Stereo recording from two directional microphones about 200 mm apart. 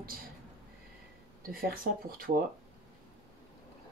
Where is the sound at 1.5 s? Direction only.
45° right (ahead or behind).